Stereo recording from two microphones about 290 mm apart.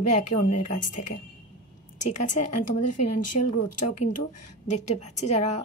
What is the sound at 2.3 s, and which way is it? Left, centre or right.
Speech, left.